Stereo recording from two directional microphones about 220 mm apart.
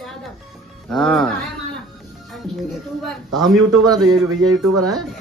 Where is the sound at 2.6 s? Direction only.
Centre (ahead or behind).